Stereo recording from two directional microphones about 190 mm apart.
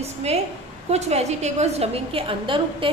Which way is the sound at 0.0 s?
35° right (ahead or behind).